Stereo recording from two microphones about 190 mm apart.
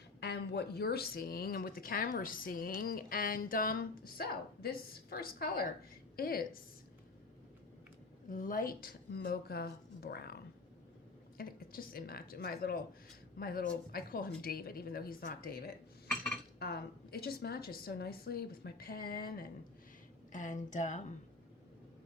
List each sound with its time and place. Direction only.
0.2 s speech: 60° left (ahead or behind)
8.3 s speech: 45° left (ahead or behind)